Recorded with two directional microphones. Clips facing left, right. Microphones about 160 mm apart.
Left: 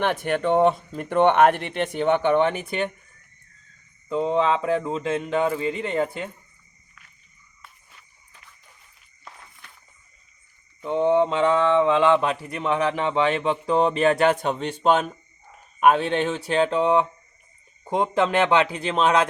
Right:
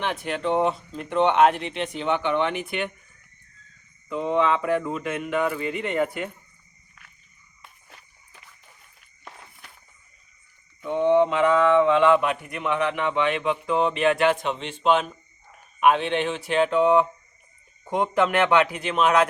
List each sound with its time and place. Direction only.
0.0 s speech: 55° left (ahead or behind); by 2.9 s 35° left (ahead or behind)
4.1 s speech: 30° left (ahead or behind)
10.8 s mantra: 30° left (ahead or behind)
17.9 s speech: 25° left (ahead or behind)